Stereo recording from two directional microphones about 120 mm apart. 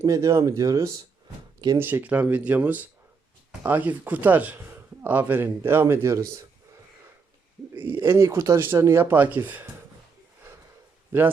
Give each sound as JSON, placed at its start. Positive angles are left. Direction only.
{"t": 0.0, "sound": "speech", "side_deg": -25}
{"t": 1.8, "sound": "speech", "side_deg": -15}
{"t": 8.0, "sound": "speech", "side_deg": -20}
{"t": 11.1, "sound": "speech", "side_deg": -20}